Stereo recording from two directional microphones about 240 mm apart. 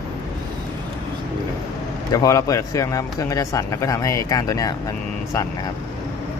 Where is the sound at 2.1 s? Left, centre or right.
Centre.